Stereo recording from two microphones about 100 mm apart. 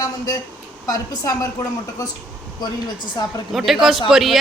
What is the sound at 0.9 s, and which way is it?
Speech, 40° left (ahead or behind).